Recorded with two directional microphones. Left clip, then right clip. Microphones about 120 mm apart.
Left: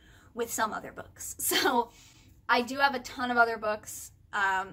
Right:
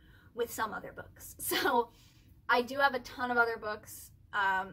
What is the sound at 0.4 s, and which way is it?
Speech, 25° left (ahead or behind).